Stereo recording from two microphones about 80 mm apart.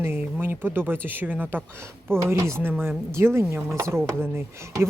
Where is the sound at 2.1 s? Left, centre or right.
Right.